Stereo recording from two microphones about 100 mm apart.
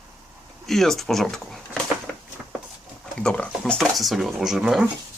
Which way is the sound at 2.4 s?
10° right (ahead or behind).